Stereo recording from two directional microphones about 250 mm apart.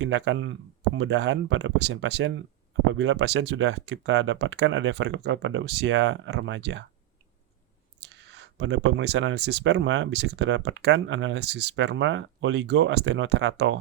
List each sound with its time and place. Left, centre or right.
0.0 s speech: right
8.1 s speech: right